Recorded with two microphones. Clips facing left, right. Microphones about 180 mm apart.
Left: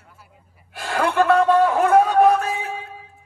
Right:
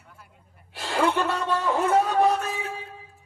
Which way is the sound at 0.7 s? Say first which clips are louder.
Left 4 dB; 55° left (ahead or behind).